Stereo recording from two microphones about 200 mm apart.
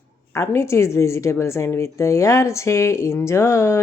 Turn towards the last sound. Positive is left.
turn(degrees=15)  # may be behind; listen again after turning